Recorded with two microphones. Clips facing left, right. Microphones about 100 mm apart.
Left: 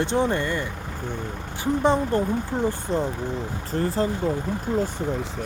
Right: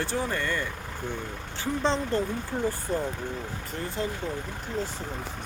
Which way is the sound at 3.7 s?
35° left (ahead or behind).